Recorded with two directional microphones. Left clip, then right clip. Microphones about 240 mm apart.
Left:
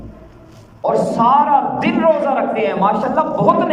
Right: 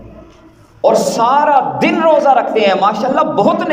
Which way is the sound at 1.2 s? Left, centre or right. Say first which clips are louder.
Left 1 dB; right.